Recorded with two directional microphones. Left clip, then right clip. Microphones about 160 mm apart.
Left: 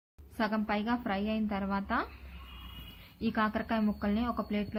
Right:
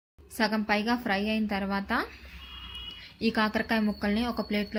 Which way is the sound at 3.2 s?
30° right (ahead or behind).